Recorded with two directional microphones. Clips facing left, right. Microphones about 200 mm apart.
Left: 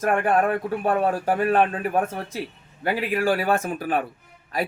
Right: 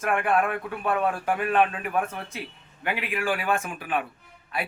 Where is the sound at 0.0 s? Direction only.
40° left (ahead or behind).